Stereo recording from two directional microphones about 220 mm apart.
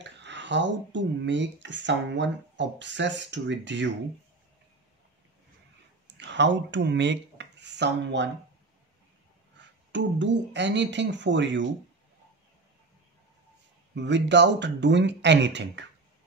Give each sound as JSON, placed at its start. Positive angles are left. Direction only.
{"t": 0.0, "sound": "speech", "side_deg": -55}
{"t": 6.1, "sound": "speech", "side_deg": -55}
{"t": 9.6, "sound": "speech", "side_deg": -55}
{"t": 13.9, "sound": "speech", "side_deg": -55}